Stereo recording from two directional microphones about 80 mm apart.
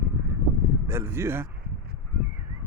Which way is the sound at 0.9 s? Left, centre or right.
Right.